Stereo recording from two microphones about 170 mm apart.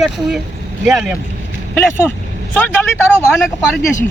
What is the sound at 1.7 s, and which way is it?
Speech, 15° left (ahead or behind).